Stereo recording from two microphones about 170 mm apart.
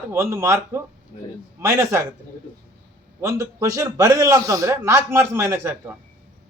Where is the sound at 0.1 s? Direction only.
15° right (ahead or behind).